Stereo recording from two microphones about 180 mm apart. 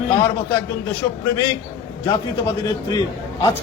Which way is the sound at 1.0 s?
20° left (ahead or behind).